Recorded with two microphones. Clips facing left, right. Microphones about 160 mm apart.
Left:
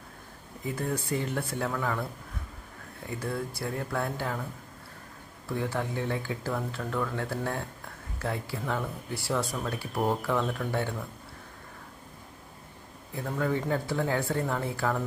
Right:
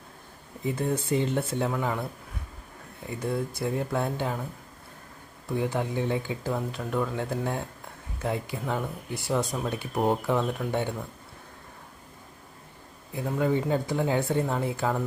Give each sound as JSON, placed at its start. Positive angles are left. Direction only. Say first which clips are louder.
{"t": 0.6, "sound": "speech", "louder": "right 4 dB", "side_deg": -25}
{"t": 3.1, "sound": "speech", "louder": "right 3 dB", "side_deg": -20}
{"t": 5.5, "sound": "speech", "louder": "right 3 dB", "side_deg": -20}
{"t": 13.2, "sound": "speech", "louder": "right 3 dB", "side_deg": -15}